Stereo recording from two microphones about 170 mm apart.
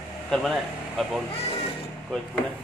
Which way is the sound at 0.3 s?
Centre (ahead or behind).